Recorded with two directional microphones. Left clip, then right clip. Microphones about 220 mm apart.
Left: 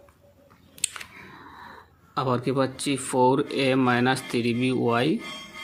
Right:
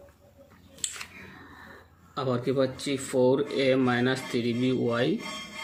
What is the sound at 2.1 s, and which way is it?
Speech, 45° left (ahead or behind).